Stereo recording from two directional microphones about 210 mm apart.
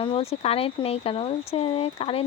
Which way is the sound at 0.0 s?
25° left (ahead or behind).